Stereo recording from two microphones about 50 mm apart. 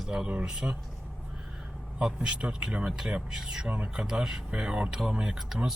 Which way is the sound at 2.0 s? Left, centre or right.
Centre.